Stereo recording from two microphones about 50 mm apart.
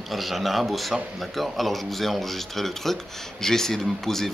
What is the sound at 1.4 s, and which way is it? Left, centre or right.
Speech, centre.